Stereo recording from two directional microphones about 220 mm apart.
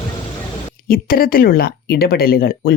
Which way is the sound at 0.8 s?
40° left (ahead or behind).